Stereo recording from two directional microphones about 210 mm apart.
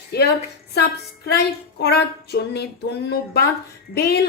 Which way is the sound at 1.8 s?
50° left (ahead or behind).